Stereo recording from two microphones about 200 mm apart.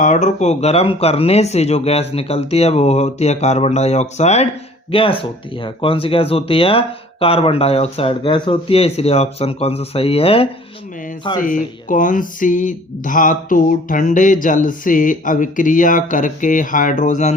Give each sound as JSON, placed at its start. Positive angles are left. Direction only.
{"t": 0.0, "sound": "speech", "side_deg": 40}
{"t": 11.3, "sound": "speech", "side_deg": 40}